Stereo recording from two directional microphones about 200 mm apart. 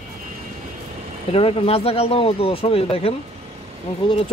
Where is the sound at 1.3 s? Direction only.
30° left (ahead or behind).